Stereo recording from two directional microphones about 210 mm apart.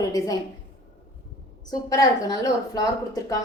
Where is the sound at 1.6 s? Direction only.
20° left (ahead or behind).